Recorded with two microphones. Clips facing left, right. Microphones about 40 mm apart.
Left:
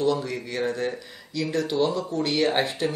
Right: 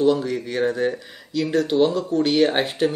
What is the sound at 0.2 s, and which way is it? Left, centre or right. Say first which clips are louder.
Speech: right 5 dB; centre.